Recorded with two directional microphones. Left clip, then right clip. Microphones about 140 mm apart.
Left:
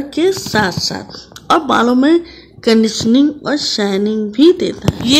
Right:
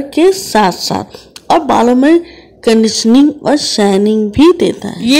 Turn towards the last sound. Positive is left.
turn(degrees=-20)  # may be behind; listen again after turning